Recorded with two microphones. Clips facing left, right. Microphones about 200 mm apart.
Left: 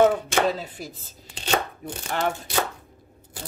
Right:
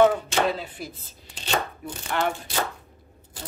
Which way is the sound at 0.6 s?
45° left (ahead or behind).